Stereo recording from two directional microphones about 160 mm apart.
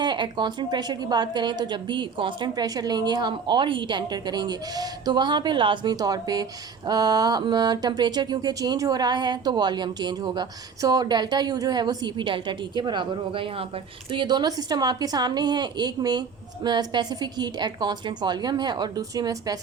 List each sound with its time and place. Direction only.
0.0 s a woman's voice: 30° right (ahead or behind)